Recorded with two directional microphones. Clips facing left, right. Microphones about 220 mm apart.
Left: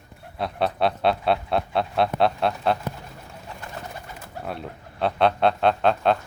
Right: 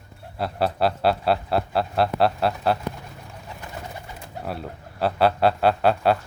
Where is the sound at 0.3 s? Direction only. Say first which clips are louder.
Right 1 dB; 5° right (ahead or behind).